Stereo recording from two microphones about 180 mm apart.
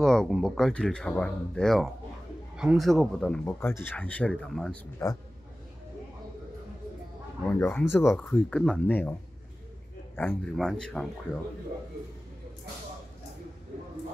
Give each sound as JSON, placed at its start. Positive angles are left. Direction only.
{"t": 0.0, "sound": "speech", "side_deg": 5}
{"t": 5.0, "sound": "a man's voice", "side_deg": 20}
{"t": 7.4, "sound": "speech", "side_deg": 5}
{"t": 10.1, "sound": "speech", "side_deg": 5}